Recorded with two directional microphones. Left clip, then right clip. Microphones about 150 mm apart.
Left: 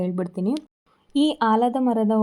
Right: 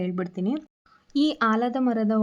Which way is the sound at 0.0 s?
5° left (ahead or behind).